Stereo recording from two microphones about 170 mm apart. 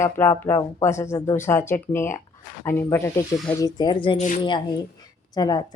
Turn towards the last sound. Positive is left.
turn(degrees=25)  # may be behind; listen again after turning